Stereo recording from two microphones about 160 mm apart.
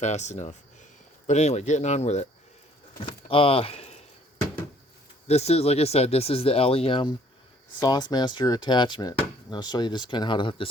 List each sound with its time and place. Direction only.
0.0 s speech: 45° left (ahead or behind)
3.0 s speech: 35° left (ahead or behind)
5.3 s speech: 40° left (ahead or behind)